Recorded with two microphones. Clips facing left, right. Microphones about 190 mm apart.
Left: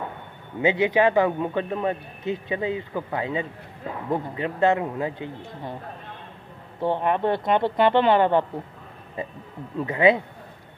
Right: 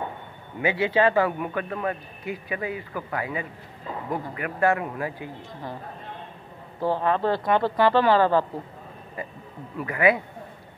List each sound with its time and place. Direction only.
0.6 s speech: 20° left (ahead or behind)
6.8 s speech: 20° left (ahead or behind)
9.8 s speech: 25° left (ahead or behind)